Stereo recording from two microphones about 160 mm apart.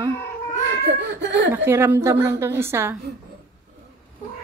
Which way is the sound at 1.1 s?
90° right.